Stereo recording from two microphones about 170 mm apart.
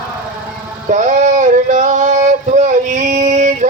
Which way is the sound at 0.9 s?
45° right (ahead or behind).